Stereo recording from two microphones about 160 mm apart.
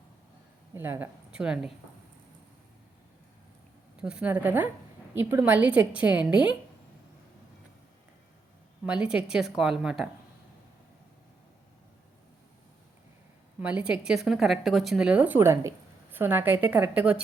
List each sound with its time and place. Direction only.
0.7 s a woman's voice: 15° right (ahead or behind)
4.0 s a woman's voice: 5° right (ahead or behind)
8.8 s a woman's voice: 5° right (ahead or behind)
13.6 s a woman's voice: 10° right (ahead or behind)